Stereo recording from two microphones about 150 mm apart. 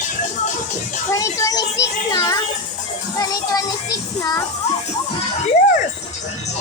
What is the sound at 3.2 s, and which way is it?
Music, 25° left (ahead or behind).